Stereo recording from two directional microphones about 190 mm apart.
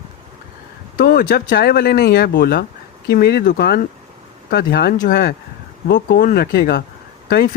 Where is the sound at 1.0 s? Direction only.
50° left (ahead or behind).